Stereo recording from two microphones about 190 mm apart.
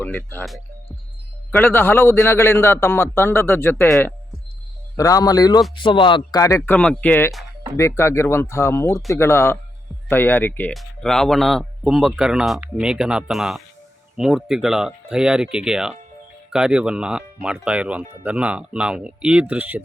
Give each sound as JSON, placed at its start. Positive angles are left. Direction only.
{"t": 0.0, "sound": "a man's voice", "side_deg": 10}
{"t": 3.8, "sound": "speech", "side_deg": 0}
{"t": 4.9, "sound": "a man's voice", "side_deg": 20}